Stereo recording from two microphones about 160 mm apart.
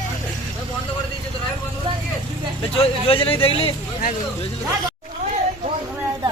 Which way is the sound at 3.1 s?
35° left (ahead or behind).